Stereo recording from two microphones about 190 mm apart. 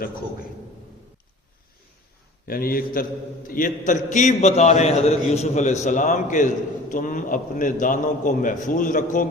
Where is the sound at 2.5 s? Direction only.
50° left (ahead or behind).